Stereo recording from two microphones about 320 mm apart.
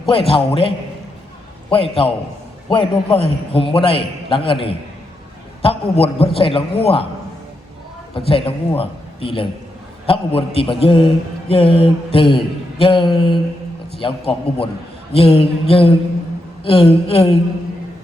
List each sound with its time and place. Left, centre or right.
0.1 s a man's voice: centre
1.7 s a man's voice: centre
8.1 s a man's voice: centre